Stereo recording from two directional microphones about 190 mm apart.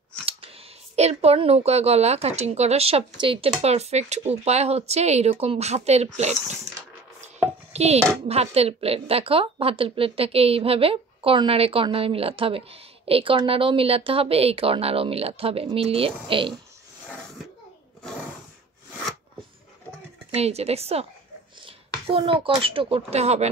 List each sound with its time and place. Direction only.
0.2 s scissors: 30° right (ahead or behind)
0.9 s a woman's voice: 35° right (ahead or behind)
7.7 s a child's voice: 35° right (ahead or behind)
20.3 s a woman's voice: 35° right (ahead or behind)